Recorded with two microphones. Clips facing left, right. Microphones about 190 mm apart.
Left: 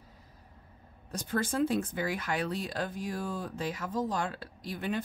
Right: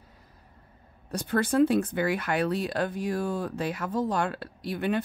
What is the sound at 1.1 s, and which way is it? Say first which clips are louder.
Speech: right 7 dB; 65° right (ahead or behind).